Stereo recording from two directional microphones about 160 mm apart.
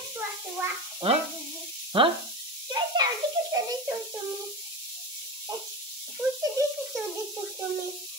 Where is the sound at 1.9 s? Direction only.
35° right (ahead or behind).